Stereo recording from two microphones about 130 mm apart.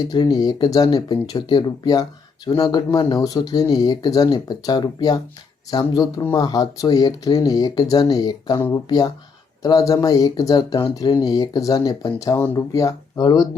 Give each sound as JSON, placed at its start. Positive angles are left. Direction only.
{"t": 0.1, "sound": "speech", "side_deg": 30}